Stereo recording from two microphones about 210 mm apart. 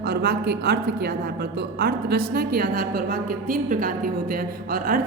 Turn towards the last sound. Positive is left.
turn(degrees=-45)  # may be behind; listen again after turning